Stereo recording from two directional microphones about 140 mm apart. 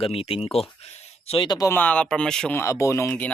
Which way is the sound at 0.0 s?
45° left (ahead or behind).